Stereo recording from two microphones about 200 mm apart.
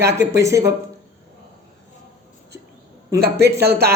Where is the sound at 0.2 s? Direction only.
15° right (ahead or behind).